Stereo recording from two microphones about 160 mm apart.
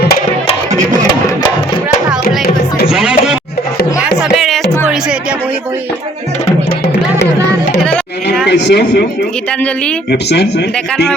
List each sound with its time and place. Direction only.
2.9 s music: 5° right (ahead or behind)
8.4 s a man's voice: 90° left
10.1 s speech: 90° left